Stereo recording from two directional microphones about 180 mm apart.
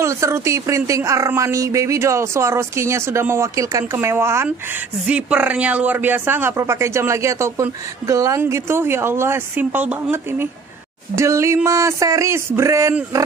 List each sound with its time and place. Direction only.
0.0 s speech: 15° right (ahead or behind)